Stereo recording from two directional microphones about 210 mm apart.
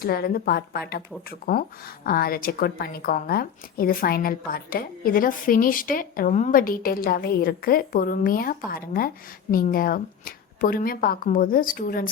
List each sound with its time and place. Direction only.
0.0 s speech: 45° left (ahead or behind)